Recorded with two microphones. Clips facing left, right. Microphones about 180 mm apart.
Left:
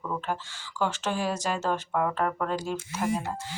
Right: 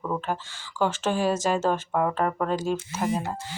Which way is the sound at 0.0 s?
25° right (ahead or behind).